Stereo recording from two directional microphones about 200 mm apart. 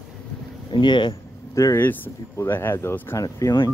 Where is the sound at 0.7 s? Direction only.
25° left (ahead or behind).